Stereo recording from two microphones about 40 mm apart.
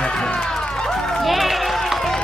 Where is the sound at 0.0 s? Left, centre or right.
Centre.